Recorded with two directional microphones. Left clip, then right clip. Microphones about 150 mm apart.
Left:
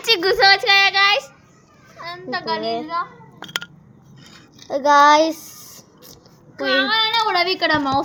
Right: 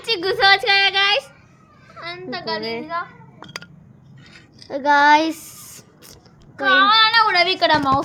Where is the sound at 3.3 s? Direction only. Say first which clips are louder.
Left 8 dB; 65° left (ahead or behind).